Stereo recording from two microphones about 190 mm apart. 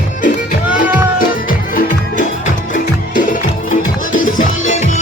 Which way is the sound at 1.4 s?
45° left (ahead or behind).